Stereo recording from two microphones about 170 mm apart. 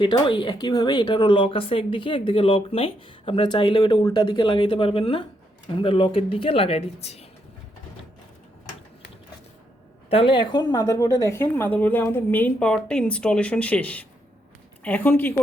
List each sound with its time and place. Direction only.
0.0 s speech: 30° left (ahead or behind)
10.1 s a woman's voice: 30° left (ahead or behind); by 15.4 s 10° left (ahead or behind)